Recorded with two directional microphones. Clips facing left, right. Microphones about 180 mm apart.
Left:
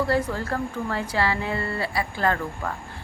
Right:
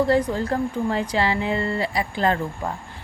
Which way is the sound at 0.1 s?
20° right (ahead or behind).